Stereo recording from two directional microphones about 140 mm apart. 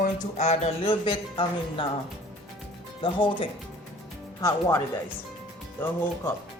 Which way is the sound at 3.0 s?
35° left (ahead or behind).